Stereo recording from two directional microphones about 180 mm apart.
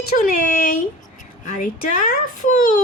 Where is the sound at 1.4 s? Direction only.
45° left (ahead or behind).